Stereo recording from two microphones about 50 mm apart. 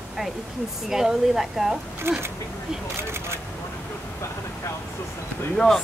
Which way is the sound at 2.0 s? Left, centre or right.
Right.